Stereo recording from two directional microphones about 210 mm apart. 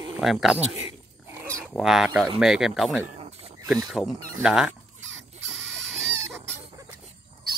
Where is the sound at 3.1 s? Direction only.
30° right (ahead or behind).